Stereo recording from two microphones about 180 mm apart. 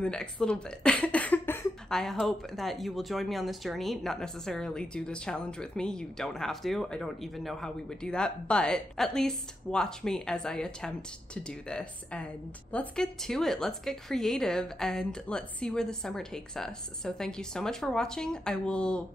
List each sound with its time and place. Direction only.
0.0 s speech: 5° left (ahead or behind)